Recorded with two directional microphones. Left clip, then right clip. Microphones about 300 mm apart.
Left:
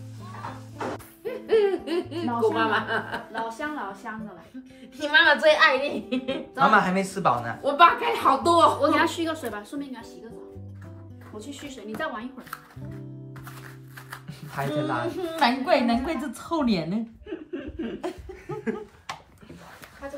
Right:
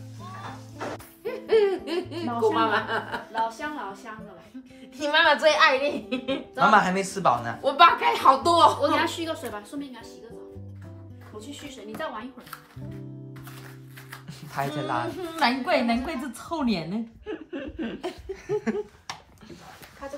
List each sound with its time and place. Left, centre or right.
1.2 s hoot: centre
4.9 s a woman's voice: centre
11.3 s a woman's voice: centre
14.7 s a woman's voice: centre
17.3 s chuckle: centre
18.3 s laughter: centre